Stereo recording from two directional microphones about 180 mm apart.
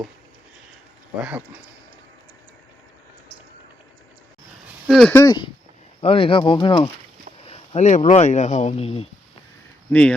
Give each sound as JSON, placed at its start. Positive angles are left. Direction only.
{"t": 1.2, "sound": "speech", "side_deg": -5}
{"t": 4.9, "sound": "speech", "side_deg": 0}
{"t": 5.1, "sound": "speech", "side_deg": 20}
{"t": 9.9, "sound": "speech", "side_deg": 5}